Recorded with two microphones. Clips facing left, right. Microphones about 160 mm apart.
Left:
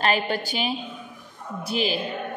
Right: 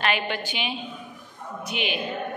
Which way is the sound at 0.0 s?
35° left (ahead or behind).